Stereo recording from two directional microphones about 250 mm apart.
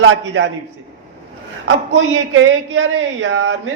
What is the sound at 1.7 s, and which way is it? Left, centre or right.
A man's voice, right.